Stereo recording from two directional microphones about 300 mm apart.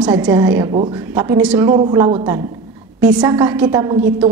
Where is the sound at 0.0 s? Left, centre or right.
Centre.